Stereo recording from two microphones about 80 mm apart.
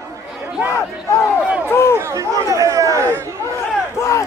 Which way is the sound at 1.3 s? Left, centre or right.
Centre.